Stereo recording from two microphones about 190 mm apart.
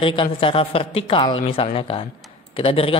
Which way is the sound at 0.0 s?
25° left (ahead or behind).